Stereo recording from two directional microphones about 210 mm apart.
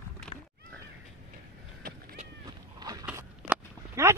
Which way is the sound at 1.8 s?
45° right (ahead or behind).